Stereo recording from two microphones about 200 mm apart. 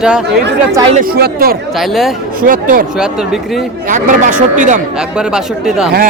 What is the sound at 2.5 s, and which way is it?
Speech, 45° right (ahead or behind).